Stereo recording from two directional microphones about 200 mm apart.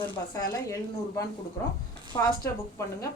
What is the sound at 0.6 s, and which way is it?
A woman's voice, 15° left (ahead or behind).